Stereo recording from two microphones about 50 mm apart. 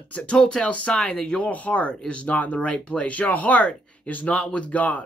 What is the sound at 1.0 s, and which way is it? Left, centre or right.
Speech, centre.